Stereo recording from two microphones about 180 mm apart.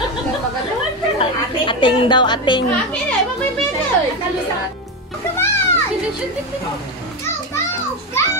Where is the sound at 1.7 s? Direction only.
25° left (ahead or behind).